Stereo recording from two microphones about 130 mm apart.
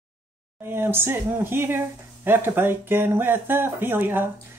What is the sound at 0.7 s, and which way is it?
Speech, 15° right (ahead or behind).